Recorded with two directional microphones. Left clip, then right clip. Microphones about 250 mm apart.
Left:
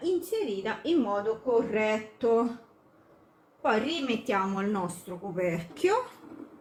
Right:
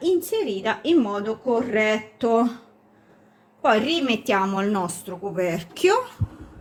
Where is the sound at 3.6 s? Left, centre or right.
Right.